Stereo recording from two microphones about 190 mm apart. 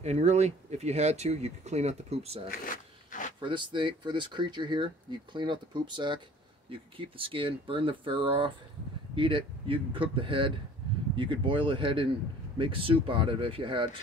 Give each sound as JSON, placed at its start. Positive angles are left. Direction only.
{"t": 0.0, "sound": "speech", "side_deg": -35}
{"t": 2.6, "sound": "a sound", "side_deg": 45}
{"t": 3.3, "sound": "speech", "side_deg": -25}